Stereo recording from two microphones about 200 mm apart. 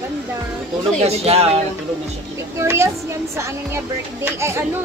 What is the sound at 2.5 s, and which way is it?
Speech, 15° right (ahead or behind).